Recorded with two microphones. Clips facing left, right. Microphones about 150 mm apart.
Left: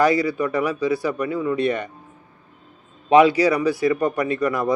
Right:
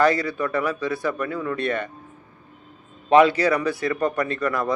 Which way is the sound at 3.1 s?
10° left (ahead or behind).